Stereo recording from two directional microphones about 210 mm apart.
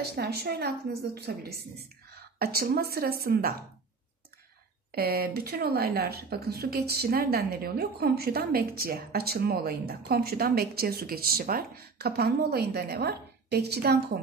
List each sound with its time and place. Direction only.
0.0 s speech: 50° right (ahead or behind)
4.9 s speech: 45° right (ahead or behind)